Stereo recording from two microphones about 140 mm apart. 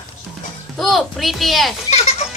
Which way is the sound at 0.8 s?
Centre (ahead or behind).